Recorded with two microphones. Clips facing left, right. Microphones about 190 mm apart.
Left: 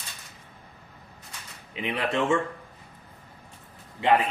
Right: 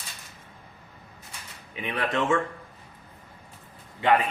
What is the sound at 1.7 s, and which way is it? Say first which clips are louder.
Speech: left 1 dB; 25° left (ahead or behind).